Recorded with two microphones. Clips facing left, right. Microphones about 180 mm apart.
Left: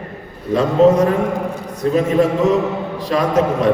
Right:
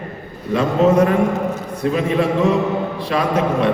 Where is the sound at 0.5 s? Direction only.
35° left (ahead or behind).